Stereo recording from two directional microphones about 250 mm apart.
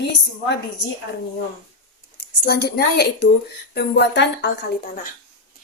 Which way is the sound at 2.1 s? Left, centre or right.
Left.